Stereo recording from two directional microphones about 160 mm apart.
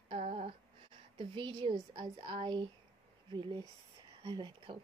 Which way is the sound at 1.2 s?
30° right (ahead or behind).